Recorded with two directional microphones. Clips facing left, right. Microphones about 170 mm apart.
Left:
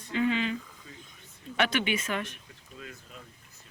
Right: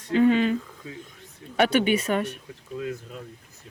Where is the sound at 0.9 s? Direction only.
90° right.